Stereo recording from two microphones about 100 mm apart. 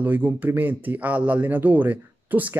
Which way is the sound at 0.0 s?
15° right (ahead or behind).